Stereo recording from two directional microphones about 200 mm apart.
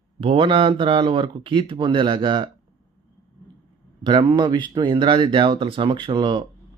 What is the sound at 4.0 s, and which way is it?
Speech, 25° right (ahead or behind).